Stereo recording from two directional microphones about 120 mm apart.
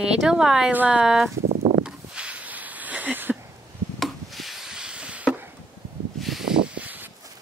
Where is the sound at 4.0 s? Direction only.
Centre (ahead or behind).